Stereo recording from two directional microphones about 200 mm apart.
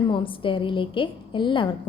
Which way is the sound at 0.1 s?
25° left (ahead or behind).